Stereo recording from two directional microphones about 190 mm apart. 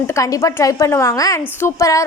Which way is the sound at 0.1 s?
15° left (ahead or behind).